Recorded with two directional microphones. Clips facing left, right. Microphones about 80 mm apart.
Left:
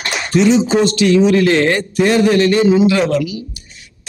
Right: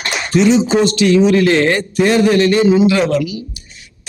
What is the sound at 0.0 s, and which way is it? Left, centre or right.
Speech, centre.